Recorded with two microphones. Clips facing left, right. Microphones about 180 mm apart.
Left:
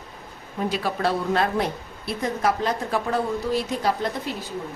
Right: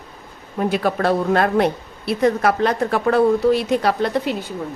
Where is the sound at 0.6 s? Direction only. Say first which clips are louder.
Right 5 dB; 60° right (ahead or behind).